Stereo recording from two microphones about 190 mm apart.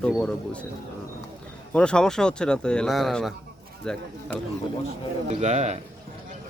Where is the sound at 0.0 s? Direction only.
5° left (ahead or behind).